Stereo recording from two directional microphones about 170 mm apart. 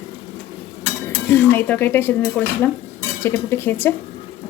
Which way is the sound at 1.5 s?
10° left (ahead or behind).